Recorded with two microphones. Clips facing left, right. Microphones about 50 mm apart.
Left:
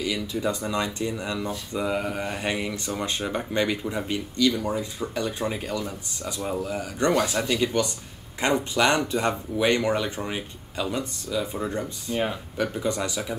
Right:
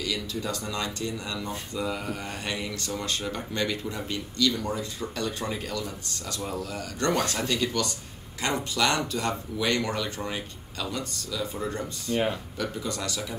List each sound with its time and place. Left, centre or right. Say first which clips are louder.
0.0 s speech: left 4 dB; centre